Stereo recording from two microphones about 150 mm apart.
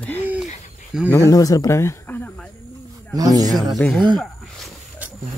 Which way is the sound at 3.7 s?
Centre (ahead or behind).